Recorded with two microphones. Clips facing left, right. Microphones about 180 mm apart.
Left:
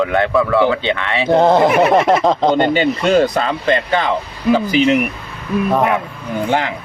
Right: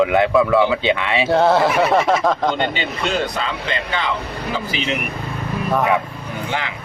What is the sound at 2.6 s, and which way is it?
A man's voice, 45° left (ahead or behind).